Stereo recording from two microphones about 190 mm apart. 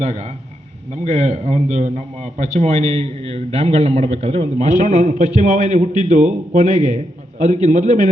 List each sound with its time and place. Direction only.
1.0 s a man's voice: 35° right (ahead or behind)